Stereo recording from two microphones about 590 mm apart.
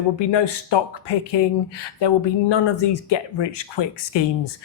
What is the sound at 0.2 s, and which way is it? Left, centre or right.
Speech, left.